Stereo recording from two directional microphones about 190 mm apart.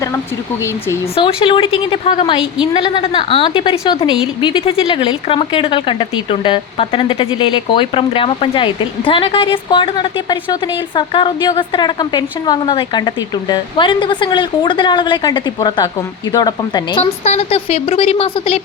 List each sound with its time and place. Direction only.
1.1 s speech: 25° left (ahead or behind)
17.2 s speech: 35° left (ahead or behind)